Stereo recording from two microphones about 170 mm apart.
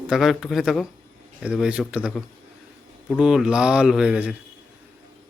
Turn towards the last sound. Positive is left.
turn(degrees=-5)  # may be behind; listen again after turning